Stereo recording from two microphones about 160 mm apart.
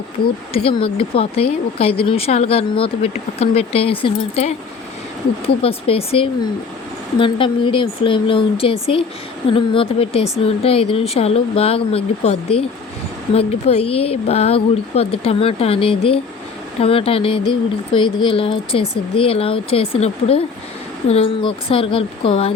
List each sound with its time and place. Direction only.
0.5 s speech: 35° left (ahead or behind)
5.6 s speech: 35° left (ahead or behind)